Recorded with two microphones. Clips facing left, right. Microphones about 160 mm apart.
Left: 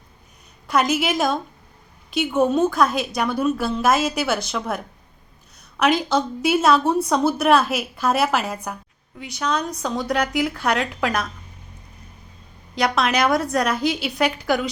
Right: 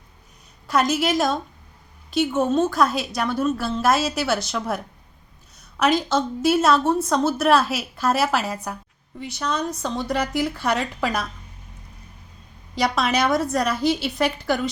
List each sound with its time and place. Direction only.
0.7 s a woman's voice: centre (ahead or behind)
5.8 s a woman's voice: centre (ahead or behind)
12.7 s a woman's voice: centre (ahead or behind)